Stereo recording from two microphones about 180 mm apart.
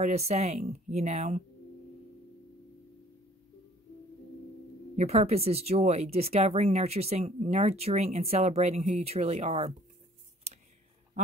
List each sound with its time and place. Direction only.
0.0 s speech: 35° right (ahead or behind)
4.9 s speech: 35° right (ahead or behind)